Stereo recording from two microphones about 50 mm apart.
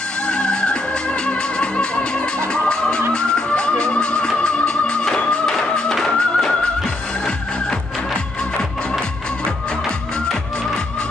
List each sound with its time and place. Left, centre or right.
0.3 s music: centre